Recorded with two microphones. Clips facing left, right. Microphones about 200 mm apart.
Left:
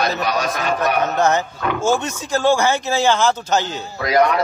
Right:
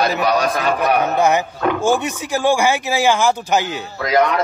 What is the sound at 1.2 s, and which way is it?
Speech, 10° right (ahead or behind).